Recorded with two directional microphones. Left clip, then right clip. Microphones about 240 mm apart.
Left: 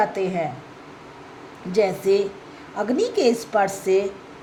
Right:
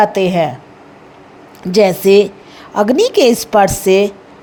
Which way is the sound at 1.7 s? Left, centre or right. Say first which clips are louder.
Right 10 dB; right.